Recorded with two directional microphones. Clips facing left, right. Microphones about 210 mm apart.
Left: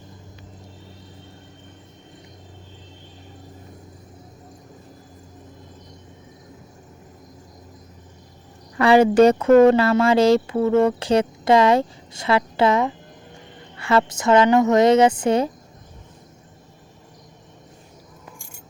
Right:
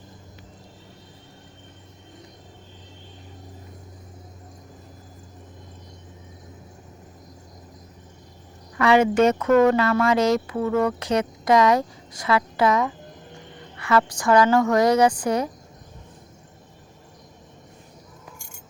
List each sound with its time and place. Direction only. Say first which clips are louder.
8.8 s speech: left 4 dB; 35° left (ahead or behind)